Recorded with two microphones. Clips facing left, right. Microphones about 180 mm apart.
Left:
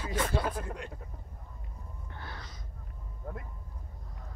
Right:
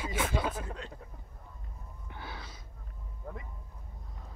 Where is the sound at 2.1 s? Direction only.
5° right (ahead or behind).